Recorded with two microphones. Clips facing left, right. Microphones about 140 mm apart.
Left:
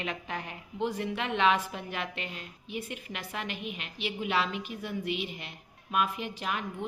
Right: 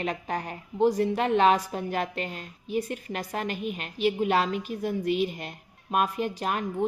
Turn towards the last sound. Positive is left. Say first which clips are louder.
# right 6 dB
turn(degrees=-45)  # may be behind; listen again after turning